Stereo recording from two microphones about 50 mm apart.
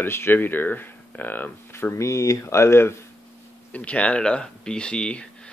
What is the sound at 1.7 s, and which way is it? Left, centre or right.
Speech, left.